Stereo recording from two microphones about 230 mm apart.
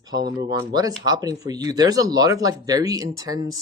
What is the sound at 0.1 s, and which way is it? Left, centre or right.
Speech, centre.